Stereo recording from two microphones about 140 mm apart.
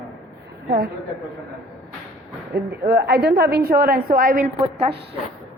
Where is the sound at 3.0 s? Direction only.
90° right.